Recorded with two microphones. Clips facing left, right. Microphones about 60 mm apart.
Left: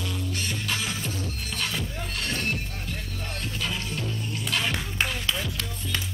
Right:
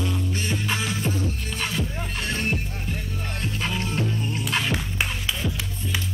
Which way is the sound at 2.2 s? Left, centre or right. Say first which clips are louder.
Right 3 dB; right.